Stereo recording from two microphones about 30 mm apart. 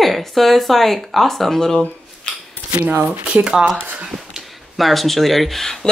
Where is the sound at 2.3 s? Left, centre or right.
Left.